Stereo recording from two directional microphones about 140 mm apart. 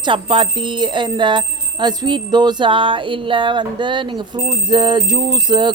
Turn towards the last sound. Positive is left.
turn(degrees=-35)  # may be behind; listen again after turning